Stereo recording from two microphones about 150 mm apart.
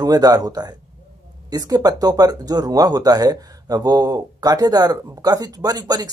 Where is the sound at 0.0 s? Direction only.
25° right (ahead or behind).